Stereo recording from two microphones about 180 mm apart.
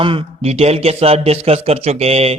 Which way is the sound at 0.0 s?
30° right (ahead or behind).